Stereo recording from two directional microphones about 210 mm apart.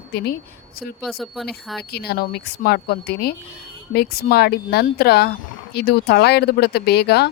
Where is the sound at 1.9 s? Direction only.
50° left (ahead or behind).